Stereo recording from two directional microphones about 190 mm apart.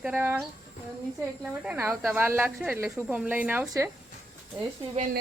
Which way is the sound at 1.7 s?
10° right (ahead or behind).